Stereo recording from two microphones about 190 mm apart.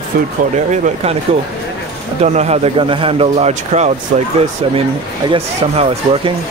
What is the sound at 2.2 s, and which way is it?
A man's voice, 35° right (ahead or behind).